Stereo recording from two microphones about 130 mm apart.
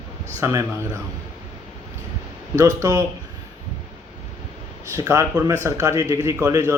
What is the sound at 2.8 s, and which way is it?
Speech, 25° right (ahead or behind).